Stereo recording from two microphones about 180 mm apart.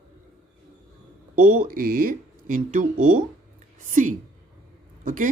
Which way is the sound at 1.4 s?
45° right (ahead or behind).